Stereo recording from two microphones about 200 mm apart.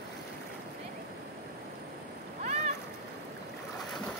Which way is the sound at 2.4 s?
35° right (ahead or behind).